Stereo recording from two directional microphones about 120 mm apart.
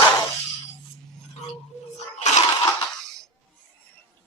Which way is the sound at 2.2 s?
75° left (ahead or behind).